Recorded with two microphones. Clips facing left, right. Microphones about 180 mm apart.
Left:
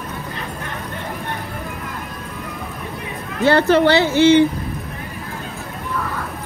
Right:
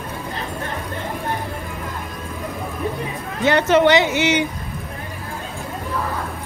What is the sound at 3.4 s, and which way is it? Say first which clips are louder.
Speech: left 1 dB; 20° right (ahead or behind).